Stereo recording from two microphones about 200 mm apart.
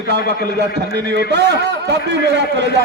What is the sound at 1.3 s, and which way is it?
A man's voice, 55° right (ahead or behind).